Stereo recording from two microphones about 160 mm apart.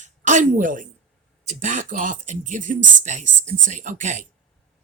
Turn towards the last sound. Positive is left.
turn(degrees=-50)  # may be behind; listen again after turning